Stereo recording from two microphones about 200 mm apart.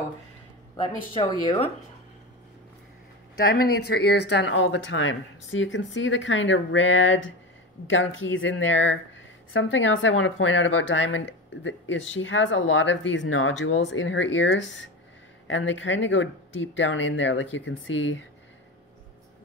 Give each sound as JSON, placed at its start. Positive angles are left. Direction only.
{"t": 1.4, "sound": "speech", "side_deg": 25}
{"t": 3.4, "sound": "speech", "side_deg": 50}